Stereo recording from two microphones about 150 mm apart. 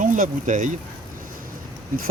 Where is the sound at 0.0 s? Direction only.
60° right (ahead or behind).